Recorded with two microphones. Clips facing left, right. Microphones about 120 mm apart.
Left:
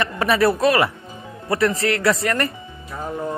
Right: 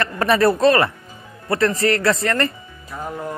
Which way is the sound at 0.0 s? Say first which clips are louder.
Right 1 dB; 5° left (ahead or behind).